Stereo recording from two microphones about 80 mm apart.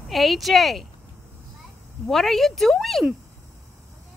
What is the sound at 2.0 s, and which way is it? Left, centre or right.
Speech, centre.